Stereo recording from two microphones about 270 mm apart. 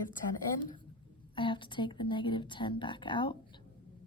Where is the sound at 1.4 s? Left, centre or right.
Centre.